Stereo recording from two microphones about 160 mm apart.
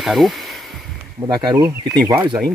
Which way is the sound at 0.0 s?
Centre (ahead or behind).